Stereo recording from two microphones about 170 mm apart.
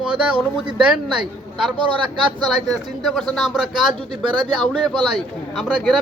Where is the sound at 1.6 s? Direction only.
30° right (ahead or behind).